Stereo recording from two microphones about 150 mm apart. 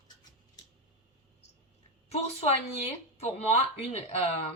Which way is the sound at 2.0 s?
45° left (ahead or behind).